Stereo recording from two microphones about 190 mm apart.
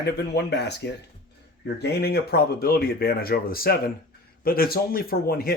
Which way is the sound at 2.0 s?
55° left (ahead or behind).